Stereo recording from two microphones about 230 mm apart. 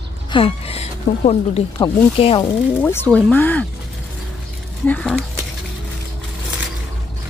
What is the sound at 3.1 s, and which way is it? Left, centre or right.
Speech, centre.